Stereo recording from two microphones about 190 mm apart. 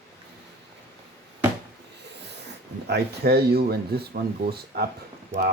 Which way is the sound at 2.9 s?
60° right (ahead or behind).